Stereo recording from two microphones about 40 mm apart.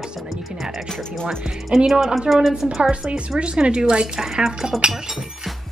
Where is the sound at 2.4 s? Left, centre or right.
Centre.